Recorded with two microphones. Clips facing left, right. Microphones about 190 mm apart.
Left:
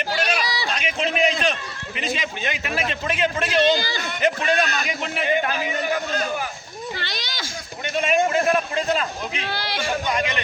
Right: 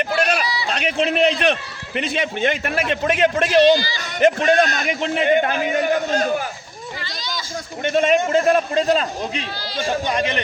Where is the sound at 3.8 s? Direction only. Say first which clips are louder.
Even; 55° left (ahead or behind).